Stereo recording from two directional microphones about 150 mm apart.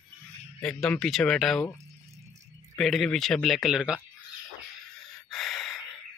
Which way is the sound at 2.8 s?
Centre (ahead or behind).